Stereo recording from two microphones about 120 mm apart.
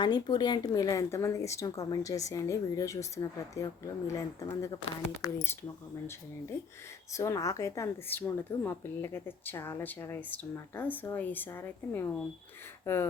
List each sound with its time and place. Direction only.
0.0 s a woman's voice: 35° left (ahead or behind); by 5.5 s 20° left (ahead or behind)
7.1 s a woman's voice: 25° left (ahead or behind)